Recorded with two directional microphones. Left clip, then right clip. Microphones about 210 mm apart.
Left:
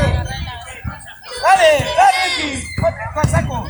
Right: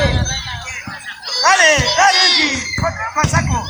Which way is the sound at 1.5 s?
50° left (ahead or behind).